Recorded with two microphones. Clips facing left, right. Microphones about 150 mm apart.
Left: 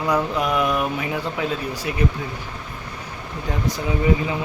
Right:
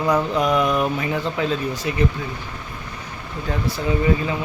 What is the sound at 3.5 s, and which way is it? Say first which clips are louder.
Speech: even; 15° left (ahead or behind).